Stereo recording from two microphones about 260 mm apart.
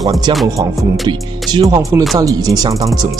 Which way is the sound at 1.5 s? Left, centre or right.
Centre.